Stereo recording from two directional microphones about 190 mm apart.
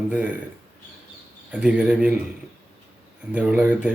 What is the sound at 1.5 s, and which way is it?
Speech, 5° right (ahead or behind).